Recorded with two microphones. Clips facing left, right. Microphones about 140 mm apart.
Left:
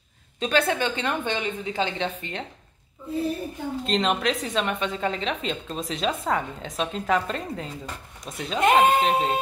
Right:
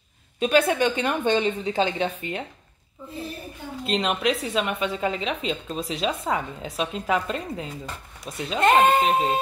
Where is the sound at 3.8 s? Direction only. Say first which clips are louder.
Even; centre (ahead or behind).